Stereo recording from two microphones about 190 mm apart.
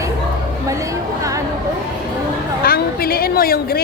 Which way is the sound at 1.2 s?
15° right (ahead or behind).